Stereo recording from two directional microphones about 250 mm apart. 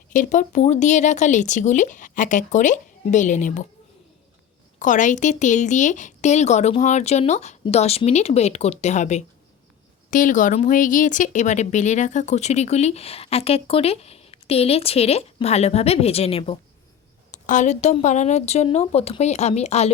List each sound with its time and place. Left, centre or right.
0.1 s speech: left
4.8 s speech: left